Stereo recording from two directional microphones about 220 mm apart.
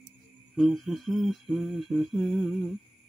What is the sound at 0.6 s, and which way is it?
Humming, centre (ahead or behind).